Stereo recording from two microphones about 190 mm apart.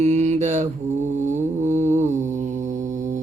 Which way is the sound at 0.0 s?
35° right (ahead or behind).